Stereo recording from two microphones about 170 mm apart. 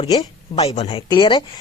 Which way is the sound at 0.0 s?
35° left (ahead or behind).